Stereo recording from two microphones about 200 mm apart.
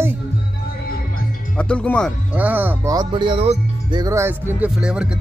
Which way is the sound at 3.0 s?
25° right (ahead or behind).